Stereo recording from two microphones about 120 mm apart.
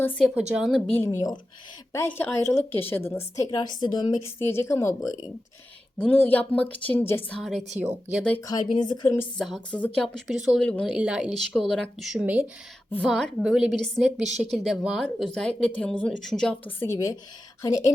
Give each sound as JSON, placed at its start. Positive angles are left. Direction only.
{"t": 0.3, "sound": "a woman's voice", "side_deg": -10}
{"t": 0.7, "sound": "speech", "side_deg": 15}
{"t": 3.2, "sound": "a woman's voice", "side_deg": 30}
{"t": 4.4, "sound": "speech", "side_deg": 20}
{"t": 6.0, "sound": "speech", "side_deg": 15}
{"t": 8.4, "sound": "a woman's voice", "side_deg": 30}
{"t": 9.4, "sound": "a woman's voice", "side_deg": 0}
{"t": 10.6, "sound": "speech", "side_deg": 10}
{"t": 10.8, "sound": "a woman's voice", "side_deg": -5}
{"t": 12.2, "sound": "a woman's voice", "side_deg": -10}
{"t": 13.1, "sound": "a woman's voice", "side_deg": 5}
{"t": 16.6, "sound": "speech", "side_deg": 20}